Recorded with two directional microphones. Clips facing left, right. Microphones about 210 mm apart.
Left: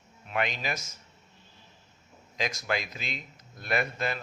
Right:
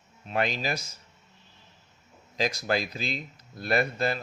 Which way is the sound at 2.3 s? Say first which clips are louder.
Right 4 dB; 35° right (ahead or behind).